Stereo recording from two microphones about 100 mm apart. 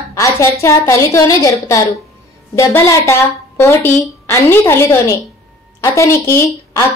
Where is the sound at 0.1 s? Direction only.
30° left (ahead or behind).